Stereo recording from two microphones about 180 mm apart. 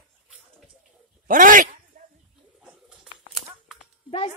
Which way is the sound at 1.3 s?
50° right (ahead or behind).